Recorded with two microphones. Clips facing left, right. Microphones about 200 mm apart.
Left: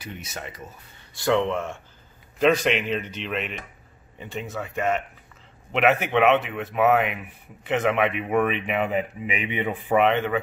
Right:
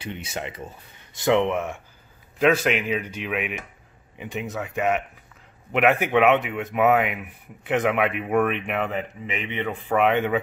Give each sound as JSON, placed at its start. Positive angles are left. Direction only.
{"t": 0.0, "sound": "speech", "side_deg": -30}
{"t": 2.4, "sound": "speech", "side_deg": -5}
{"t": 5.7, "sound": "speech", "side_deg": -10}
{"t": 9.9, "sound": "speech", "side_deg": -5}